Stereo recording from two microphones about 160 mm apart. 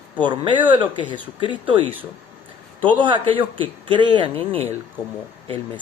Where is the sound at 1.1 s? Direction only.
30° left (ahead or behind).